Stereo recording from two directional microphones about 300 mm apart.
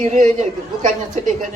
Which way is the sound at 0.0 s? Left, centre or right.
Right.